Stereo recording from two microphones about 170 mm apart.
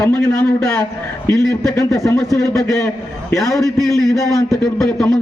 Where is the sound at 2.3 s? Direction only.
15° left (ahead or behind).